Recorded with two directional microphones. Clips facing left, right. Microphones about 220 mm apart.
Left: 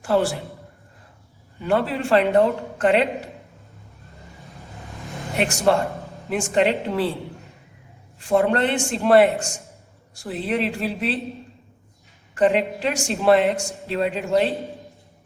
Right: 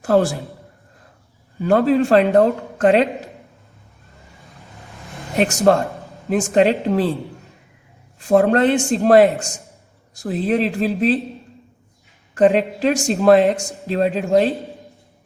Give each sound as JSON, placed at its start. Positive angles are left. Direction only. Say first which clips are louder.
{"t": 0.0, "sound": "a man's voice", "louder": "right 4 dB", "side_deg": -40}
{"t": 1.6, "sound": "a man's voice", "louder": "right 7 dB", "side_deg": -40}
{"t": 5.4, "sound": "a man's voice", "louder": "right 4 dB", "side_deg": -40}
{"t": 8.3, "sound": "a man's voice", "louder": "right 5 dB", "side_deg": -40}
{"t": 12.3, "sound": "a man's voice", "louder": "right 4 dB", "side_deg": -40}